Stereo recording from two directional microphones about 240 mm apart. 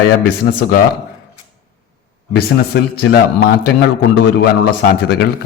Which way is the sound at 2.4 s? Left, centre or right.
Left.